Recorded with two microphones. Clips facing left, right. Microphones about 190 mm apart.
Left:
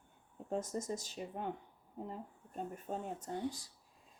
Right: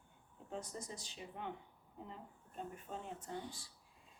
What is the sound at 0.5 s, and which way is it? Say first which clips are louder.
Speech: left 8 dB; 45° left (ahead or behind).